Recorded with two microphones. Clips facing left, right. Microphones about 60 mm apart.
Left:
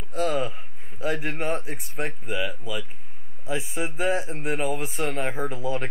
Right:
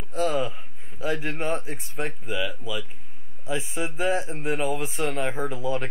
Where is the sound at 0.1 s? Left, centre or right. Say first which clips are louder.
Even; left.